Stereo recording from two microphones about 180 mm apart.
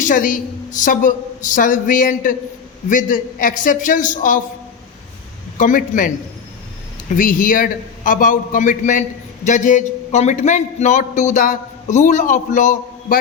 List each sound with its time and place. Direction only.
0.0 s a man's voice: 50° left (ahead or behind)
5.5 s a man's voice: 45° left (ahead or behind)
7.1 s a man's voice: 50° left (ahead or behind)